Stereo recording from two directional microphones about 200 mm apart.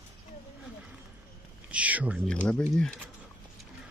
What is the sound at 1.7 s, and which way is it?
Speech, 5° right (ahead or behind).